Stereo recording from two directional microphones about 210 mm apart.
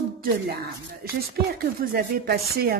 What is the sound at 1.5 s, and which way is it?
Speech, 45° right (ahead or behind).